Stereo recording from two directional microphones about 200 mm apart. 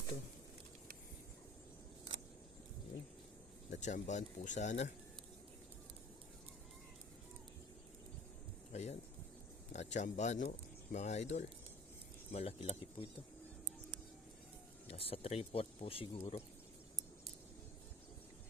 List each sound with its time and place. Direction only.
3.7 s speech: 35° left (ahead or behind)
8.7 s a sound: 35° left (ahead or behind)
9.7 s speech: 35° left (ahead or behind)
14.8 s speech: 30° left (ahead or behind)